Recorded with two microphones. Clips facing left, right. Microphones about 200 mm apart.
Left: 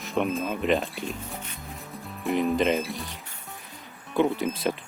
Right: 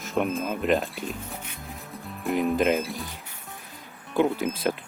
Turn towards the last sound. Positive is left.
turn(degrees=0)  # may be behind; listen again after turning